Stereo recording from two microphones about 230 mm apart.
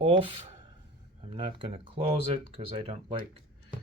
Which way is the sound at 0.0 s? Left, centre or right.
Right.